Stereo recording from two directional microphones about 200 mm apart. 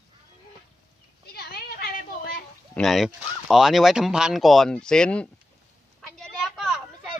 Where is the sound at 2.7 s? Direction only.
Centre (ahead or behind).